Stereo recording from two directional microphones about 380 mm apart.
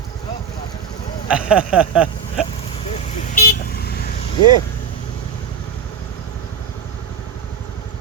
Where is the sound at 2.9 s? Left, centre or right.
Left.